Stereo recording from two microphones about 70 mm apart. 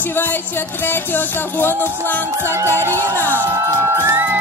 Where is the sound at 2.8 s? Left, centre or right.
Right.